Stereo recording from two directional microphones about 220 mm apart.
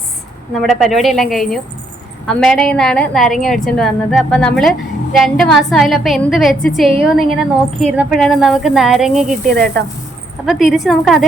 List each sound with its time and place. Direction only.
0.6 s a woman's voice: centre (ahead or behind)